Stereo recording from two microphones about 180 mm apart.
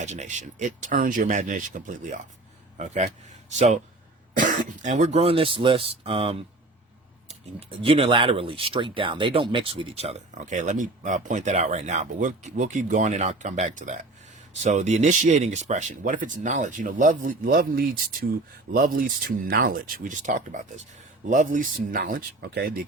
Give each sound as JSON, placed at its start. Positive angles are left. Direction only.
{"t": 0.0, "sound": "speech", "side_deg": -40}